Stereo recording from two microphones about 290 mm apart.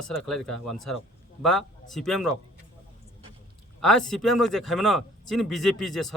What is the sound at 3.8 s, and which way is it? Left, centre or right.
Speech, centre.